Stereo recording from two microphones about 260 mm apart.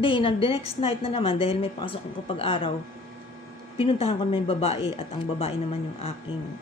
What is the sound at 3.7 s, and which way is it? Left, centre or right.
Speech, left.